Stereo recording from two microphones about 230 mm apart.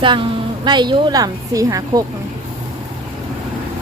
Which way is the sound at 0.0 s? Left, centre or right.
Right.